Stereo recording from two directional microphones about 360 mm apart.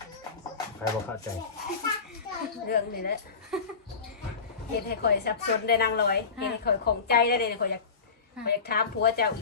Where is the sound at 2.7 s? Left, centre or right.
Left.